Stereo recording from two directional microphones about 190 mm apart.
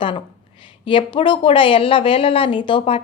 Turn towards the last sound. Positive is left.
turn(degrees=25)  # may be behind; listen again after turning